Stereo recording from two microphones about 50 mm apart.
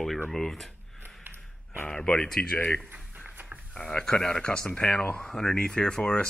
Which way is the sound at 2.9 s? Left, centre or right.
Right.